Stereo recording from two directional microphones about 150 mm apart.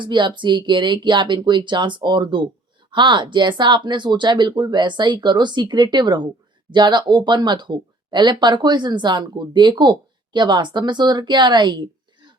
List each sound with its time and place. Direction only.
0.0 s speech: 30° right (ahead or behind)